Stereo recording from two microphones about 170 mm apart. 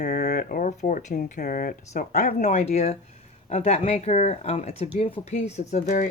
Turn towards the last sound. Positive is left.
turn(degrees=45)  # may be behind; listen again after turning